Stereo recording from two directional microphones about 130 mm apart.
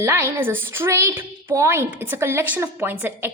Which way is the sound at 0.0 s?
20° right (ahead or behind).